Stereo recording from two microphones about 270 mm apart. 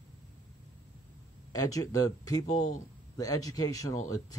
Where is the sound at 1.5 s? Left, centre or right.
Centre.